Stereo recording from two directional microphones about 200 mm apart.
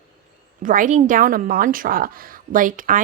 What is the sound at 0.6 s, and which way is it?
A woman's voice, 40° right (ahead or behind).